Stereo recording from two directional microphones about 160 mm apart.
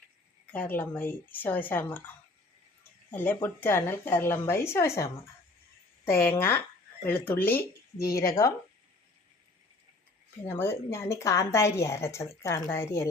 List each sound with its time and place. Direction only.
0.5 s a woman's voice: 10° left (ahead or behind)
3.1 s a woman's voice: 10° left (ahead or behind)
10.4 s a woman's voice: 15° left (ahead or behind)